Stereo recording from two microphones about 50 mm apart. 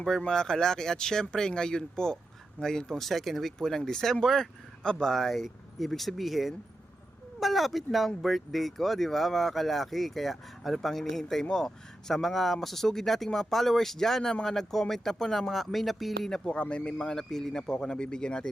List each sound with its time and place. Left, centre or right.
0.2 s speech: centre
16.3 s speech: centre